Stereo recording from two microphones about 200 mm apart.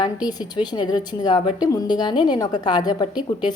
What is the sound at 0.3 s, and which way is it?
A woman's voice, 20° left (ahead or behind).